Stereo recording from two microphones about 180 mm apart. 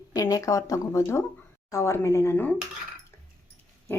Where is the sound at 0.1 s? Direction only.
20° left (ahead or behind).